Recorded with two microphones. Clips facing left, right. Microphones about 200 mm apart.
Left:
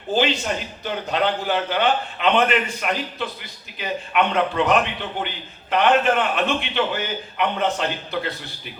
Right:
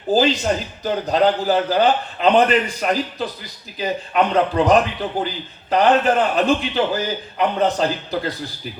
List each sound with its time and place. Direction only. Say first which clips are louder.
0.1 s a man's voice: right 4 dB; 35° right (ahead or behind)